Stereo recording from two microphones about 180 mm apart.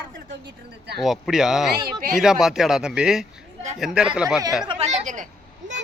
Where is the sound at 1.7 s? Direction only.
60° right (ahead or behind).